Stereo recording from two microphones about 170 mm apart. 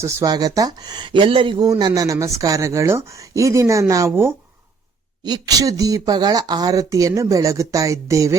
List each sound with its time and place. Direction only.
0.0 s speech: 20° right (ahead or behind)